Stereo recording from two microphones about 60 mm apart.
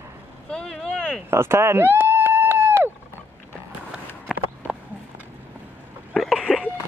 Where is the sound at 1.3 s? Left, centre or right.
Right.